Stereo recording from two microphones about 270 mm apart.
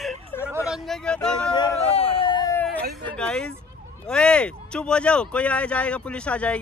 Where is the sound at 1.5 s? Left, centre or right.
Centre.